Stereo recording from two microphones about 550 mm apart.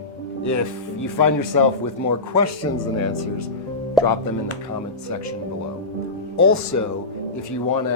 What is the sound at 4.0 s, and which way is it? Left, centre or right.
Music, centre.